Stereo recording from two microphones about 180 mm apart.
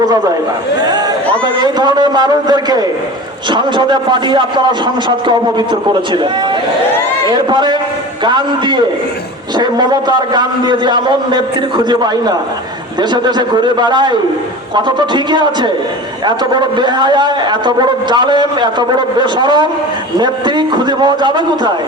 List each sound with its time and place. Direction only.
0.8 s a man's voice: 20° right (ahead or behind)
3.8 s a man's voice: 25° right (ahead or behind)
7.3 s a man's voice: 25° right (ahead or behind)